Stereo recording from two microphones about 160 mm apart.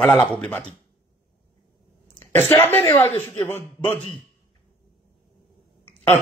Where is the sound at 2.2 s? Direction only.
15° left (ahead or behind).